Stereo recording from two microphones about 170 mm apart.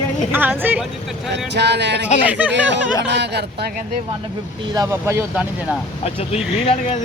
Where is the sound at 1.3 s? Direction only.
85° right.